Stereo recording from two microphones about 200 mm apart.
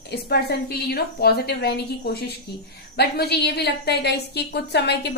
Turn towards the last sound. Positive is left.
turn(degrees=55)  # may be behind; listen again after turning